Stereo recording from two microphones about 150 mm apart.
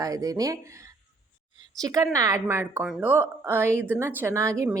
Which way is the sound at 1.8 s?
25° right (ahead or behind).